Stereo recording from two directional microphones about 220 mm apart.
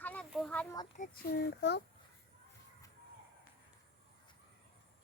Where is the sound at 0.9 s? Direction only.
30° left (ahead or behind).